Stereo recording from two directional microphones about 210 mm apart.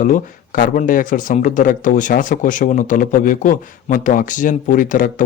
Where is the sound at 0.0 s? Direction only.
40° left (ahead or behind).